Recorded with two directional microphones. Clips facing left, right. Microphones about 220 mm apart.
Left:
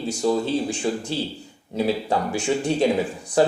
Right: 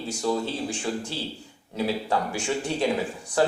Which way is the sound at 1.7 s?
20° left (ahead or behind).